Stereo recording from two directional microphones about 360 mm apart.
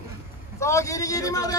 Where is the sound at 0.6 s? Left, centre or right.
Centre.